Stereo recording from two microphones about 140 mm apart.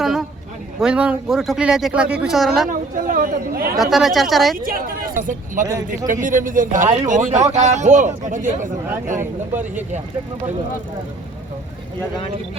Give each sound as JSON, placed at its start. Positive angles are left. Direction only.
{"t": 0.0, "sound": "a sound", "side_deg": 0}
{"t": 0.8, "sound": "speech", "side_deg": -5}
{"t": 2.6, "sound": "speech", "side_deg": -75}
{"t": 3.8, "sound": "speech", "side_deg": 0}
{"t": 4.6, "sound": "speech", "side_deg": -90}
{"t": 5.6, "sound": "a man's voice", "side_deg": -20}
{"t": 6.2, "sound": "a man's voice", "side_deg": -70}